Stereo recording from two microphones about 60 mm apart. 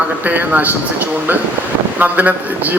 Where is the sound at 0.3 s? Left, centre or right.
Right.